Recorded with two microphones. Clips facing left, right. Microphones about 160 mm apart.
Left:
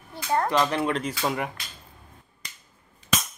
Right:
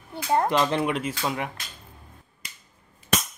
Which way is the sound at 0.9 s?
Centre (ahead or behind).